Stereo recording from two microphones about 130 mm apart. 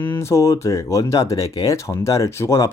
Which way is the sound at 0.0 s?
20° left (ahead or behind).